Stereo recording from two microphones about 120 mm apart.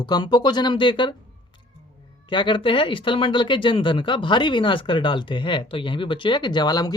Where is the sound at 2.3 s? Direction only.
40° left (ahead or behind).